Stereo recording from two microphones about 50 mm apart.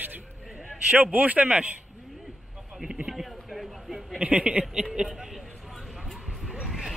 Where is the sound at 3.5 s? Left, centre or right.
Centre.